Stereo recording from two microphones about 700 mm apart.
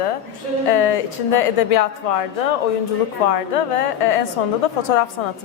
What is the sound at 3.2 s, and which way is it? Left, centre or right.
A woman's voice, left.